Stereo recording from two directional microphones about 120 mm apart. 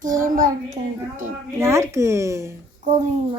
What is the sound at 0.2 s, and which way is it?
A child's voice, 90° right.